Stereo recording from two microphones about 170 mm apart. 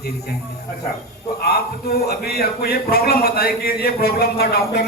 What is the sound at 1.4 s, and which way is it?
Speech, 65° left (ahead or behind).